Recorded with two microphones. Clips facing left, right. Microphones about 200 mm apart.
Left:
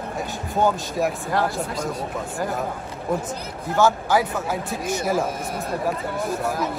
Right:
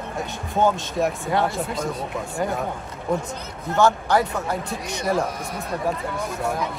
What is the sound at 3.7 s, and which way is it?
Speech, centre (ahead or behind).